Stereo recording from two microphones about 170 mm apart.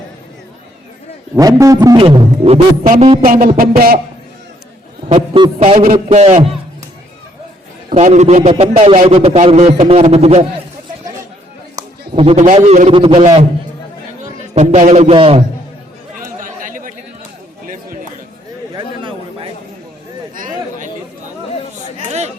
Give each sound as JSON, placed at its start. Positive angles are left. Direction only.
{"t": 1.4, "sound": "a man's voice", "side_deg": -20}
{"t": 2.0, "sound": "a man's voice", "side_deg": -30}
{"t": 3.2, "sound": "music", "side_deg": -55}
{"t": 3.6, "sound": "a man's voice", "side_deg": -60}
{"t": 5.0, "sound": "a man's voice", "side_deg": -35}
{"t": 6.1, "sound": "a man's voice", "side_deg": -40}
{"t": 7.9, "sound": "a man's voice", "side_deg": -40}
{"t": 12.1, "sound": "a man's voice", "side_deg": -35}
{"t": 14.3, "sound": "a man's voice", "side_deg": -40}
{"t": 16.2, "sound": "chatter", "side_deg": -50}
{"t": 18.7, "sound": "chatter", "side_deg": -30}
{"t": 20.3, "sound": "chatter", "side_deg": -50}
{"t": 21.9, "sound": "chatter", "side_deg": -40}